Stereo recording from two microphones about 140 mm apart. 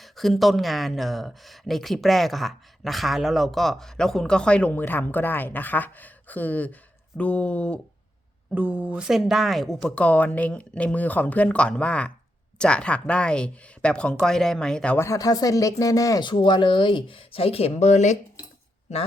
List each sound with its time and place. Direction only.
0.0 s speech: centre (ahead or behind)
8.5 s speech: 10° right (ahead or behind); by 14.9 s 5° left (ahead or behind)
14.9 s speech: 20° left (ahead or behind); by 18.2 s 55° left (ahead or behind)